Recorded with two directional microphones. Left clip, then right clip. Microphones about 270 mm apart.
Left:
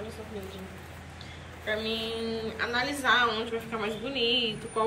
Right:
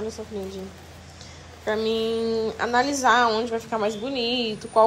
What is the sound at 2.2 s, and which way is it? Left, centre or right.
A woman's voice, centre.